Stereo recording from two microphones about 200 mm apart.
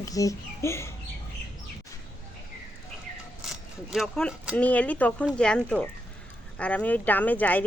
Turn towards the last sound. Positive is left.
turn(degrees=10)  # may be behind; listen again after turning